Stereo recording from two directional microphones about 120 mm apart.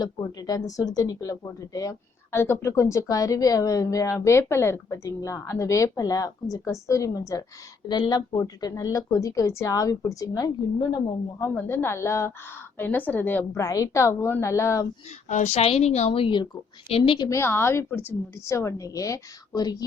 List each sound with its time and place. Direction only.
0.0 s a woman's voice: 30° left (ahead or behind); by 13.7 s 15° left (ahead or behind)
13.7 s speech: 25° left (ahead or behind)
15.3 s a woman's voice: 85° left
15.6 s a woman's voice: 60° left (ahead or behind); by 17.2 s 40° left (ahead or behind)
17.2 s speech: 20° left (ahead or behind)